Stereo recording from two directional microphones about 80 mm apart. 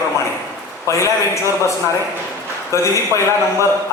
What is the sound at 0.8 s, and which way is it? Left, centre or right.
Speech, left.